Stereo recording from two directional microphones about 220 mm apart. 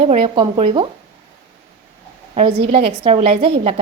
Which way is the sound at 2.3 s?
30° right (ahead or behind).